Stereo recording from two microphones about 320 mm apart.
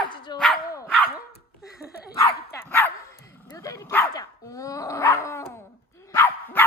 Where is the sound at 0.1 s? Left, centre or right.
Centre.